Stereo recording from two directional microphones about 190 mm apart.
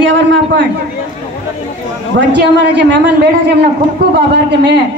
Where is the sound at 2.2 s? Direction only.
65° right (ahead or behind).